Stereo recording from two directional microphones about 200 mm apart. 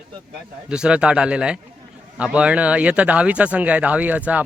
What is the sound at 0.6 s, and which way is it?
Speech, 5° right (ahead or behind).